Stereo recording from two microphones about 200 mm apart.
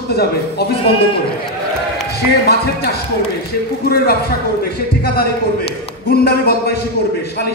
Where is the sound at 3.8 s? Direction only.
50° left (ahead or behind).